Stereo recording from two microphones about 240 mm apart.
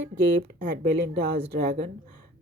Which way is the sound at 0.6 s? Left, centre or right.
Right.